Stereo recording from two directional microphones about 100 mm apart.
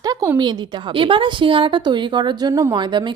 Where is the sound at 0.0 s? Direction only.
40° right (ahead or behind).